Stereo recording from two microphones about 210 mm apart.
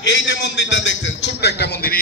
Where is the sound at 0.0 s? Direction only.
60° left (ahead or behind).